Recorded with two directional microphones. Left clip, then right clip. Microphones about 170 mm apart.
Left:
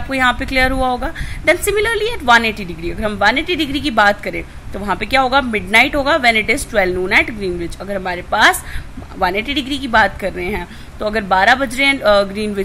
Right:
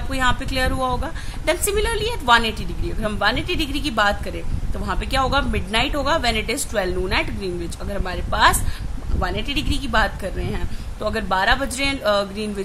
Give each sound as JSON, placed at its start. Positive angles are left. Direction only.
{"t": 0.1, "sound": "a woman's voice", "side_deg": 20}